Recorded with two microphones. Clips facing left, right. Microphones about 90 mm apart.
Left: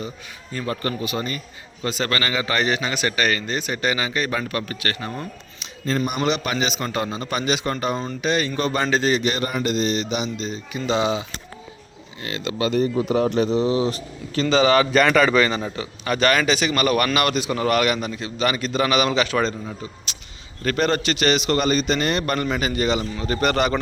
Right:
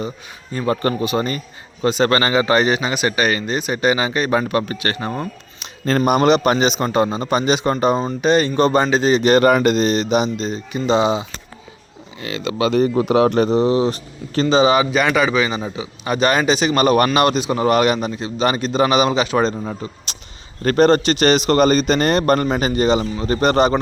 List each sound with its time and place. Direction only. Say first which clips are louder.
0.5 s a man's voice: right 7 dB; 30° right (ahead or behind)
5.5 s a sound: right 5 dB; 65° right (ahead or behind)
6.1 s speech: right 9 dB; 50° right (ahead or behind); by 8.8 s 30° right (ahead or behind)
8.8 s a man's voice: right 4 dB; 20° right (ahead or behind)
9.2 s speech: right 10 dB; 55° right (ahead or behind); by 10.8 s 40° right (ahead or behind)
10.8 s a man's voice: right 5 dB; 25° right (ahead or behind)
12.5 s speech: right 4 dB; 80° right
13.0 s speech: right 6 dB; 70° right (ahead or behind); by 14.4 s 35° right (ahead or behind)
14.4 s a man's voice: right 3 dB; 20° right (ahead or behind)
19.6 s speech: right 5 dB; 40° right (ahead or behind)